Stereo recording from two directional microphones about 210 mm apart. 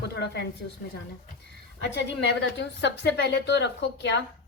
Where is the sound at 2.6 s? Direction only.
55° left (ahead or behind).